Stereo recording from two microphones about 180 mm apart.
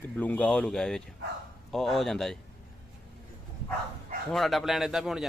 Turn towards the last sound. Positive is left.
turn(degrees=-5)  # may be behind; listen again after turning